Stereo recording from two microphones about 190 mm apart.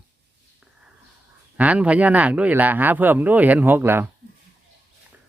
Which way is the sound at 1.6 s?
5° right (ahead or behind).